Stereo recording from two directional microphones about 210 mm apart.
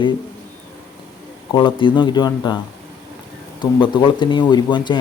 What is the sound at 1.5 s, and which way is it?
Speech, 25° left (ahead or behind).